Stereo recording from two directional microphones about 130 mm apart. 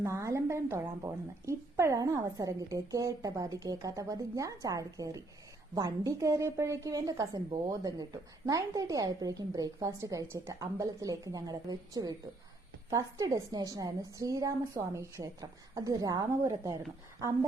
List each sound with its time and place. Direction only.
0.0 s a woman's voice: 20° right (ahead or behind)